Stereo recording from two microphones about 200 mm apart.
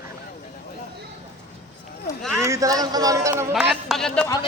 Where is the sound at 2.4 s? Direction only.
15° right (ahead or behind).